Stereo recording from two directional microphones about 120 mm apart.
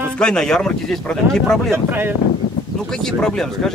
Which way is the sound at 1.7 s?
20° right (ahead or behind).